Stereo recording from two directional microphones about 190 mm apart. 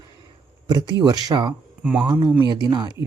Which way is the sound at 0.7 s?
20° right (ahead or behind).